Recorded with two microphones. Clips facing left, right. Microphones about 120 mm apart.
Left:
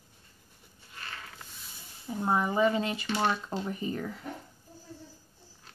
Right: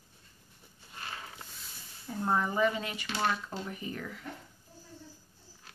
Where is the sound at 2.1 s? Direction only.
15° left (ahead or behind); by 4.2 s 30° left (ahead or behind).